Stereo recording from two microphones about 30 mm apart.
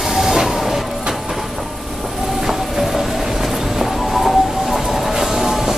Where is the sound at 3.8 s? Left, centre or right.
Centre.